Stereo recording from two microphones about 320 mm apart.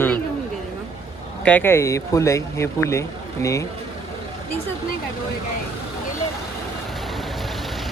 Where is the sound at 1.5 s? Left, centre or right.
Centre.